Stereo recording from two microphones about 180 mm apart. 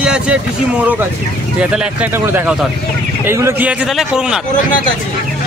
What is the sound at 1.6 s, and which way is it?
A man's voice, 5° right (ahead or behind).